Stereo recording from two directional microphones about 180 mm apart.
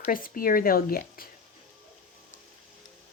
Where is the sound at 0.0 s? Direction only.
50° left (ahead or behind).